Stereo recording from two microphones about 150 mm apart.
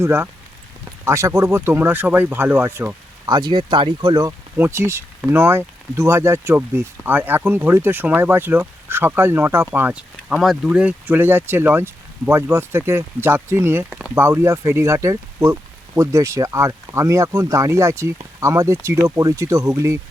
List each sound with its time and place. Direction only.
0.0 s speech: 15° right (ahead or behind)
3.2 s speech: 30° right (ahead or behind); by 10.0 s 15° right (ahead or behind)
10.2 s speech: centre (ahead or behind); by 20.0 s 20° right (ahead or behind)